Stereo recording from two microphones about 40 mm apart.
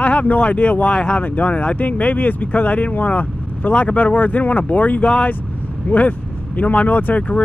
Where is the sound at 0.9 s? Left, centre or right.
Left.